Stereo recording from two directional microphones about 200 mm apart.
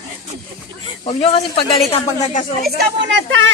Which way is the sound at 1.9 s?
30° left (ahead or behind).